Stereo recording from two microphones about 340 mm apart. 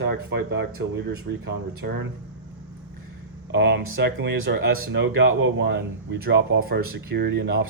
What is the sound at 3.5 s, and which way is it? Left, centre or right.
Speech, right.